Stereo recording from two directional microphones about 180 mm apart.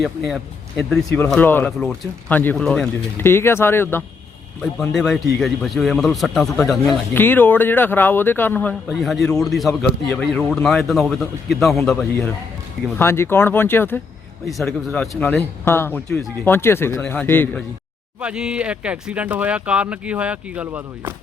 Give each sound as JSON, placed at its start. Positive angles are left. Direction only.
{"t": 0.8, "sound": "speech", "side_deg": 5}
{"t": 4.9, "sound": "speech", "side_deg": 0}
{"t": 6.8, "sound": "speech", "side_deg": 10}
{"t": 8.9, "sound": "speech", "side_deg": 0}
{"t": 13.0, "sound": "speech", "side_deg": 15}
{"t": 18.2, "sound": "speech", "side_deg": -5}